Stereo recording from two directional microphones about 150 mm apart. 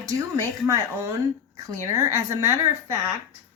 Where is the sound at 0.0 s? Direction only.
20° right (ahead or behind).